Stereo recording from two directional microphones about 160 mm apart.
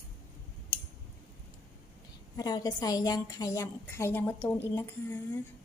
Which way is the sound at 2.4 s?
25° left (ahead or behind).